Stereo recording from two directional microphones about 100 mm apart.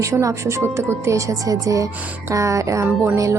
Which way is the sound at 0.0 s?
30° right (ahead or behind).